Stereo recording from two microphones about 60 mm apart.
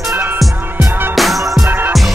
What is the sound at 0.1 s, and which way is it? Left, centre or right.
Music, right.